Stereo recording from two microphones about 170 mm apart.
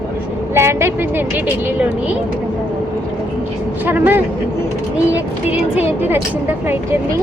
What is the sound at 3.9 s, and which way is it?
Speech, 10° right (ahead or behind).